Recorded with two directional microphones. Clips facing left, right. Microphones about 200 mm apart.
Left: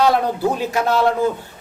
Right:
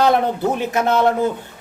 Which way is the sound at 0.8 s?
20° right (ahead or behind).